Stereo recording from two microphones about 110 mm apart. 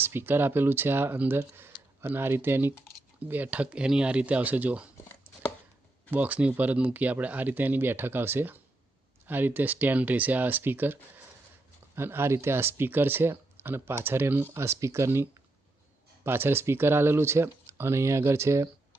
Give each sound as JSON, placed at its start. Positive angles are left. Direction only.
{"t": 0.0, "sound": "speech", "side_deg": -20}
{"t": 6.1, "sound": "speech", "side_deg": -15}
{"t": 11.9, "sound": "speech", "side_deg": -20}